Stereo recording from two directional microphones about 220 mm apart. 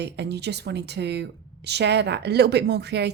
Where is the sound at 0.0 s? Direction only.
50° right (ahead or behind).